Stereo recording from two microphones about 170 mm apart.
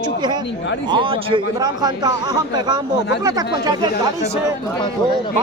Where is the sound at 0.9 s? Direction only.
30° right (ahead or behind).